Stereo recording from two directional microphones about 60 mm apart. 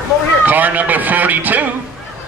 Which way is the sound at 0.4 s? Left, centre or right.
Right.